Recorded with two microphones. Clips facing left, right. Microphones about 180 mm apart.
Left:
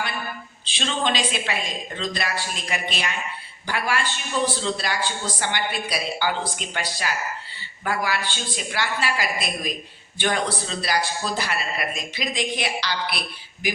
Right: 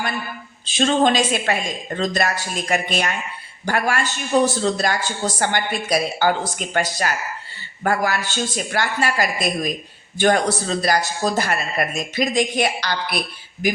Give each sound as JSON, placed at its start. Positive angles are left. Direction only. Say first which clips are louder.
{"t": 0.6, "sound": "a man's voice", "louder": "right 9 dB", "side_deg": -45}
{"t": 7.9, "sound": "a man's voice", "louder": "right 5 dB", "side_deg": -45}